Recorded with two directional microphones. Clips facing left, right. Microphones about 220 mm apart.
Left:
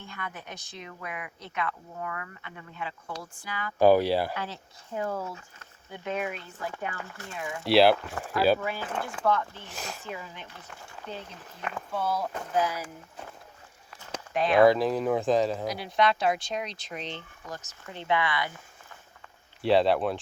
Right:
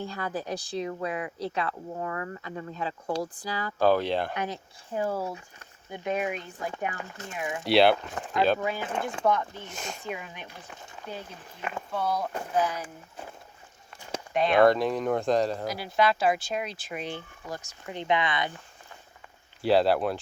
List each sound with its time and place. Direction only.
0.0 s speech: 35° right (ahead or behind)
3.8 s speech: 10° left (ahead or behind)
4.4 s speech: 15° right (ahead or behind)
7.6 s speech: centre (ahead or behind)
8.0 s speech: 15° right (ahead or behind)
9.6 s speech: centre (ahead or behind)
10.0 s speech: 15° right (ahead or behind)
11.9 s speech: centre (ahead or behind)
14.3 s speech: centre (ahead or behind); by 18.5 s 20° right (ahead or behind)
19.6 s speech: centre (ahead or behind)